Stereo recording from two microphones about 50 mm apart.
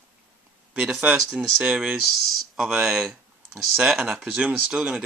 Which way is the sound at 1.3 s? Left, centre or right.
Centre.